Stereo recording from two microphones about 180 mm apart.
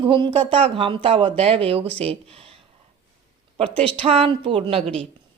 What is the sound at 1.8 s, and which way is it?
Speech, 10° left (ahead or behind).